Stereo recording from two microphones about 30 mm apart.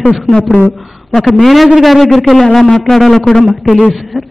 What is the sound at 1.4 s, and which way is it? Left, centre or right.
A man's voice, centre.